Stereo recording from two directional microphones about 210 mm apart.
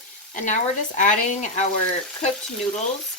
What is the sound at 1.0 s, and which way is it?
Speech, 35° left (ahead or behind).